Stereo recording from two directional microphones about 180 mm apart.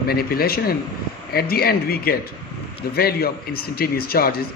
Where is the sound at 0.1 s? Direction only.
55° left (ahead or behind).